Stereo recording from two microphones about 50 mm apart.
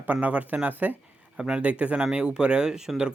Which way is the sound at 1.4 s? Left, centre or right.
Right.